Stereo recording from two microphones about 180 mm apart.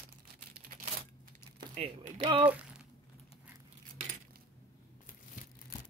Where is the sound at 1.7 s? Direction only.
40° right (ahead or behind).